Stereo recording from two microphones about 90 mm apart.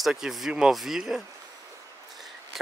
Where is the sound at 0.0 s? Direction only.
5° right (ahead or behind).